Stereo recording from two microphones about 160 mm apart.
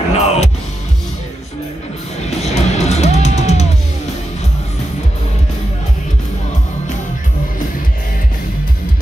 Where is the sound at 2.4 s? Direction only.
45° left (ahead or behind).